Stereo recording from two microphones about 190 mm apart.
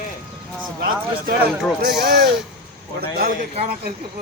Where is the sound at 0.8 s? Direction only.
50° right (ahead or behind).